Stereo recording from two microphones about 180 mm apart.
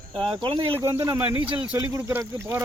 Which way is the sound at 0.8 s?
15° right (ahead or behind).